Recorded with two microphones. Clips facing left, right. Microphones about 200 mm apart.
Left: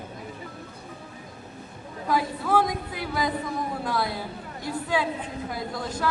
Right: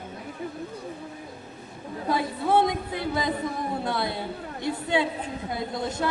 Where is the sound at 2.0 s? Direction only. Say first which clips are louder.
Even; 25° right (ahead or behind).